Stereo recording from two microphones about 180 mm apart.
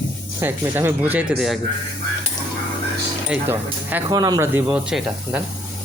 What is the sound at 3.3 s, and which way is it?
Speech, 10° right (ahead or behind).